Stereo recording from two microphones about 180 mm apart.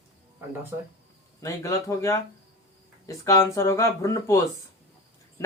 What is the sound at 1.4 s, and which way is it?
Speech, 15° left (ahead or behind).